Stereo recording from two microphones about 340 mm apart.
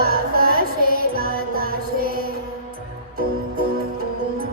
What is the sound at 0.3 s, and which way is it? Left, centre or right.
Music, right.